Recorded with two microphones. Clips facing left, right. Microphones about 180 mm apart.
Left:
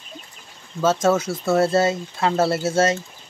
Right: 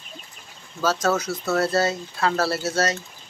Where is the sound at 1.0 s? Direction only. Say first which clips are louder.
Left 4 dB; 25° left (ahead or behind).